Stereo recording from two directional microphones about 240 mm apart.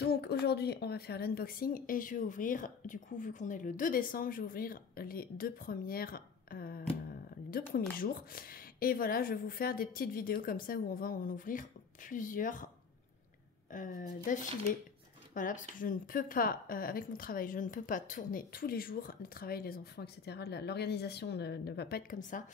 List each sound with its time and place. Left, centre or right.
0.1 s a woman's voice: left
13.7 s a woman's voice: left